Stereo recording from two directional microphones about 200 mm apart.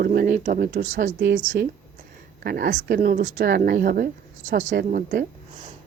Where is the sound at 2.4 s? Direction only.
50° right (ahead or behind).